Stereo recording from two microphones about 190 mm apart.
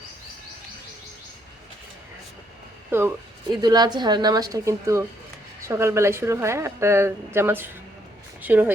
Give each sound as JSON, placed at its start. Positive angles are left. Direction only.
{"t": 2.9, "sound": "speech", "side_deg": -10}
{"t": 3.5, "sound": "a woman's voice", "side_deg": -20}